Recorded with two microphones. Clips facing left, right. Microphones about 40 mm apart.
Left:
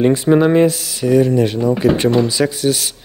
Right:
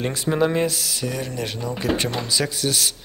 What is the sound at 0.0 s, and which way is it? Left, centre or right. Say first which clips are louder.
Speech: left 9 dB; centre.